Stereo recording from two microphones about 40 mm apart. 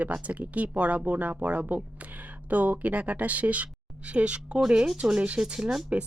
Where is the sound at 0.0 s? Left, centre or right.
Right.